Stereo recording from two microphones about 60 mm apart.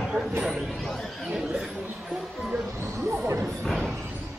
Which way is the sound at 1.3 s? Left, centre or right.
Centre.